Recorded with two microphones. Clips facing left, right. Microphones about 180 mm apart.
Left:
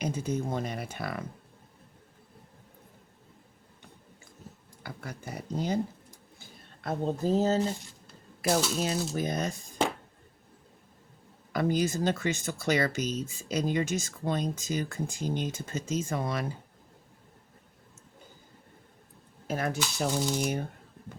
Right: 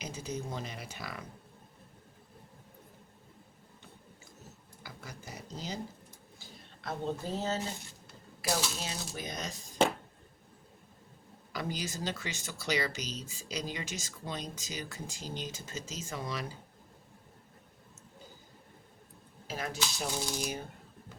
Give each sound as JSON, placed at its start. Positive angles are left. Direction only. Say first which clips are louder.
{"t": 0.0, "sound": "speech", "louder": "left 8 dB", "side_deg": 55}
{"t": 4.8, "sound": "speech", "louder": "left 7 dB", "side_deg": 55}
{"t": 8.8, "sound": "speech", "louder": "left 10 dB", "side_deg": 50}
{"t": 11.5, "sound": "speech", "louder": "left 10 dB", "side_deg": 55}
{"t": 19.5, "sound": "speech", "louder": "left 6 dB", "side_deg": 55}